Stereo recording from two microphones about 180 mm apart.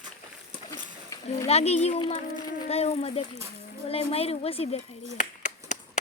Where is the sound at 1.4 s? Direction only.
35° left (ahead or behind).